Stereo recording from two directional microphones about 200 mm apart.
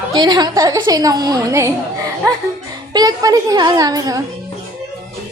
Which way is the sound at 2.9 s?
20° right (ahead or behind).